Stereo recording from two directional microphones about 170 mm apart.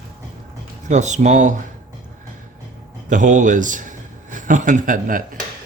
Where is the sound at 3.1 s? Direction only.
50° right (ahead or behind).